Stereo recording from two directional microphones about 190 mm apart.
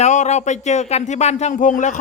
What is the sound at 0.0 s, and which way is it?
Speech, 40° left (ahead or behind).